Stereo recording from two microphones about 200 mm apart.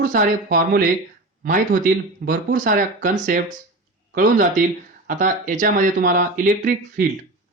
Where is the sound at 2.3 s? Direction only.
40° right (ahead or behind).